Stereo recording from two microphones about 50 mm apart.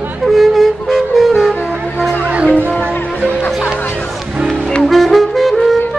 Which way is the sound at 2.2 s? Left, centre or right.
Right.